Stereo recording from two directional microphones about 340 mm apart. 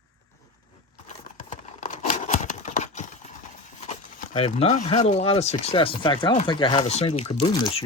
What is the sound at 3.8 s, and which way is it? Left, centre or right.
Speech, centre.